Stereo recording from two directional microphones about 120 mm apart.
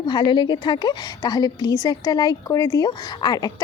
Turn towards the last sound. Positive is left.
turn(degrees=35)  # may be behind; listen again after turning